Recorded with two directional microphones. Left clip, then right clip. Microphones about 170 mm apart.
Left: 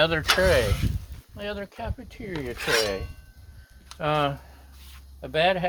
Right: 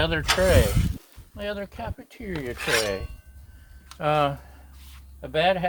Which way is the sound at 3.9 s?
25° left (ahead or behind).